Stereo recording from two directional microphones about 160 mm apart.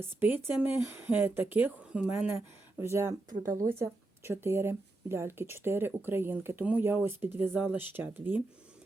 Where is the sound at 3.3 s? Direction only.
55° right (ahead or behind).